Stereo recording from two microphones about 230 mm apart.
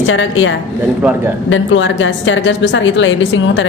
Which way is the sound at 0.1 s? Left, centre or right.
Left.